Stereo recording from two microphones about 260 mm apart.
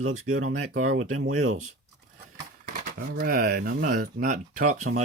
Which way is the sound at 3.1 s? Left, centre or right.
Right.